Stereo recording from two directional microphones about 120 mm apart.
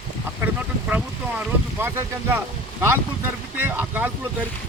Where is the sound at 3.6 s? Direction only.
15° right (ahead or behind).